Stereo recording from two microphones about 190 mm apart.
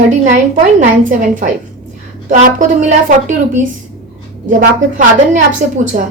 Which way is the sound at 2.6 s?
40° right (ahead or behind).